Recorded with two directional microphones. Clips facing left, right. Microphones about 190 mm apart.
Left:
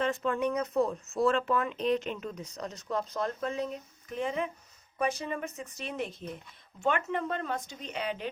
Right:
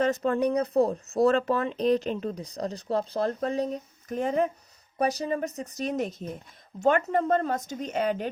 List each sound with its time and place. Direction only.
0.0 s speech: 40° right (ahead or behind)